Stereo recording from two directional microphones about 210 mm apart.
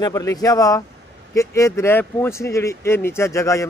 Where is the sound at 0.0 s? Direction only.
15° left (ahead or behind).